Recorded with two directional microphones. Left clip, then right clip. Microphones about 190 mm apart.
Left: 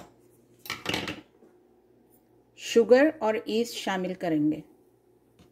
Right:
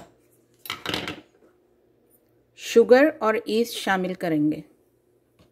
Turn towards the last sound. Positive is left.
turn(degrees=-15)  # may be behind; listen again after turning